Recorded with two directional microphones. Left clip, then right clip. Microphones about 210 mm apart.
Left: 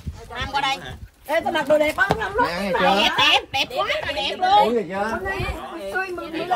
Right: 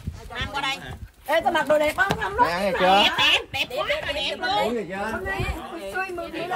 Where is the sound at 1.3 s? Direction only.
15° right (ahead or behind).